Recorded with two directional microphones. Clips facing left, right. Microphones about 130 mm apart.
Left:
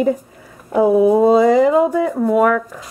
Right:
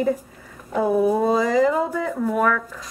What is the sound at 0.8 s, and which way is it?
Speech, 20° left (ahead or behind).